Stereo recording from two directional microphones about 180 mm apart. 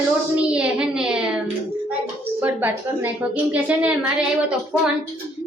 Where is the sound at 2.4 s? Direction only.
10° right (ahead or behind).